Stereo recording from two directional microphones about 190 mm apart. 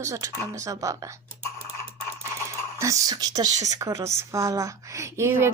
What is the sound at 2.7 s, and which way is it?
A woman's voice, 15° right (ahead or behind).